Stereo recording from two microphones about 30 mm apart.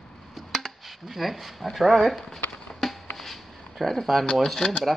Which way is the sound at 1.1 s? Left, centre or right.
Centre.